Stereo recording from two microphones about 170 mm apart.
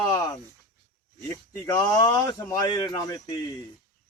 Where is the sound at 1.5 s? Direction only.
20° left (ahead or behind).